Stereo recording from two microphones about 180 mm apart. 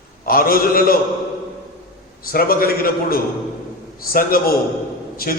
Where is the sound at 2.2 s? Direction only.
55° left (ahead or behind).